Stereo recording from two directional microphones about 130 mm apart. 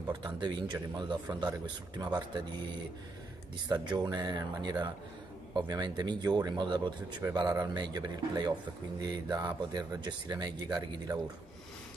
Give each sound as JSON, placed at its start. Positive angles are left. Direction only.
{"t": 0.1, "sound": "speech", "side_deg": -35}